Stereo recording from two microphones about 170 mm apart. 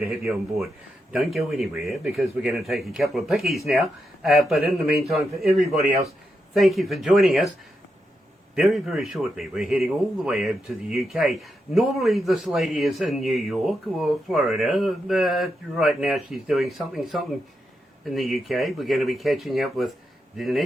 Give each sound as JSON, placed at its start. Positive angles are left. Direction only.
{"t": 1.1, "sound": "a man's voice", "side_deg": 0}
{"t": 8.5, "sound": "a man's voice", "side_deg": 0}